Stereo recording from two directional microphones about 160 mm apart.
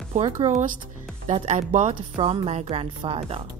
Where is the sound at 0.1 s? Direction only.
45° right (ahead or behind).